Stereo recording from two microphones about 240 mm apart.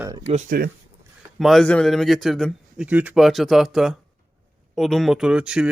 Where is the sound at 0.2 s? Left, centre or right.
Right.